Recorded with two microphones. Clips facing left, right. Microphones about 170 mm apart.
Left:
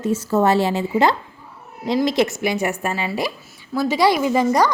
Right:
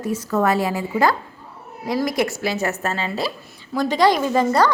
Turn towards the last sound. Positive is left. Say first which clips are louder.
# left 1 dB
turn(degrees=10)  # may be behind; listen again after turning